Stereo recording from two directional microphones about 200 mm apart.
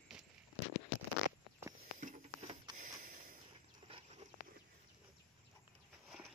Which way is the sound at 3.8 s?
25° right (ahead or behind).